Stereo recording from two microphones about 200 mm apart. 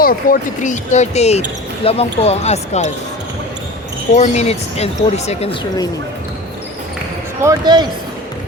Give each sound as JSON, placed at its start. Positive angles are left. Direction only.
{"t": 0.0, "sound": "speech", "side_deg": 45}
{"t": 4.1, "sound": "speech", "side_deg": 35}
{"t": 7.4, "sound": "speech", "side_deg": -20}